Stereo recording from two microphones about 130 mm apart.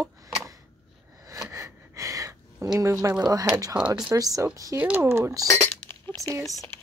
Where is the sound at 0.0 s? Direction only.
25° right (ahead or behind).